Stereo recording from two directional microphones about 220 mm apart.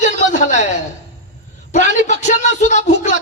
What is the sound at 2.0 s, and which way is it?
Speech, 35° left (ahead or behind).